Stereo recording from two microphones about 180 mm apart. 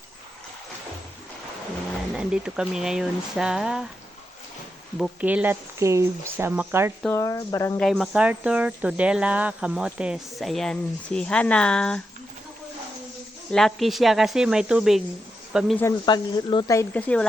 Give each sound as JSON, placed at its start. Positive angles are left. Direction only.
{"t": 2.1, "sound": "speech", "side_deg": -5}
{"t": 4.9, "sound": "speech", "side_deg": -5}
{"t": 7.1, "sound": "speech", "side_deg": 15}
{"t": 7.8, "sound": "speech", "side_deg": 0}
{"t": 13.5, "sound": "speech", "side_deg": 0}
{"t": 15.8, "sound": "speech", "side_deg": 20}